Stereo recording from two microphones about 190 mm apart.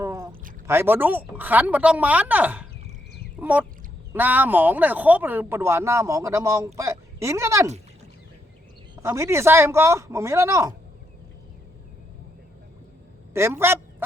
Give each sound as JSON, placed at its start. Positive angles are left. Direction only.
{"t": 0.0, "sound": "a sound", "side_deg": -15}
{"t": 0.7, "sound": "speech", "side_deg": -10}
{"t": 9.0, "sound": "speech", "side_deg": -15}
{"t": 13.3, "sound": "speech", "side_deg": -15}